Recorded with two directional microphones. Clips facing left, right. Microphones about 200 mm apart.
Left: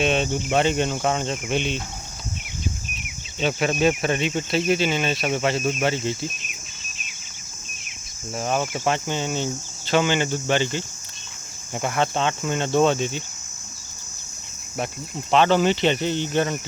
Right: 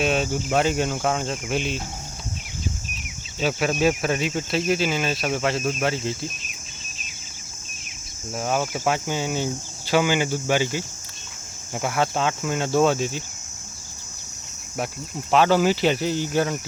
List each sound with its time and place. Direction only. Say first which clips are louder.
0.0 s speech: left 1 dB; 5° right (ahead or behind)
3.4 s speech: even; centre (ahead or behind)
8.4 s speech: even; 5° right (ahead or behind)
15.3 s speech: even; 5° right (ahead or behind)